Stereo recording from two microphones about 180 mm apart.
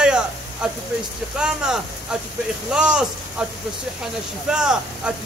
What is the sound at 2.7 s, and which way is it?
Speech, 5° right (ahead or behind).